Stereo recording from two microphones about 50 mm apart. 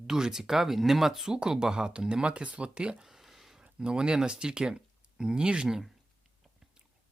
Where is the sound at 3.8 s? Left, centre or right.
Centre.